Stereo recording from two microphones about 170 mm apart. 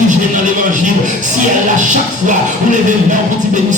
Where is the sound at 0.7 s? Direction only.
50° right (ahead or behind).